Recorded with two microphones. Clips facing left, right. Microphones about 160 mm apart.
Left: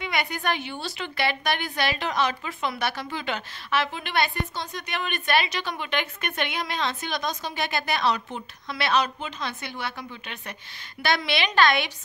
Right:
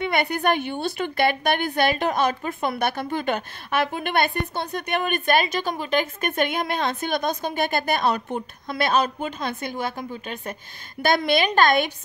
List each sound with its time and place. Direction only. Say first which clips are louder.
0.0 s a woman's voice: right 6 dB; 55° right (ahead or behind)